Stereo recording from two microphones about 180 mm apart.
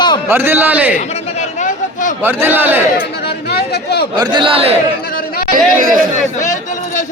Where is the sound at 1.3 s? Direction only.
45° left (ahead or behind).